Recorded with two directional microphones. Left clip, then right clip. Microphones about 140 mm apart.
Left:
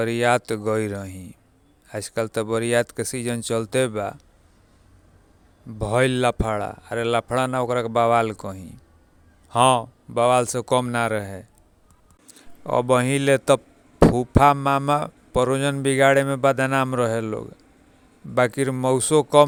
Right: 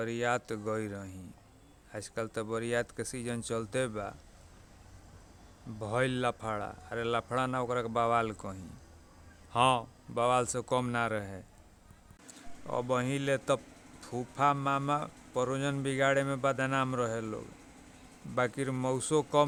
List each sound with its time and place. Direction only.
0.0 s speech: 60° left (ahead or behind)
5.8 s speech: 50° left (ahead or behind)
12.6 s speech: 60° left (ahead or behind)